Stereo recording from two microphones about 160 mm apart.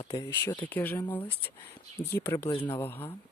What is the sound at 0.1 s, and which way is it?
Speech, 20° left (ahead or behind).